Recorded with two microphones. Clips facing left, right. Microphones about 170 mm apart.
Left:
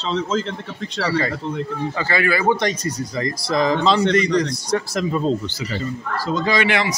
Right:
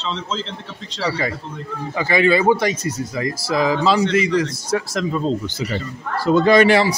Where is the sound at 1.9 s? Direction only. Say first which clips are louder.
Right 6 dB; 15° right (ahead or behind).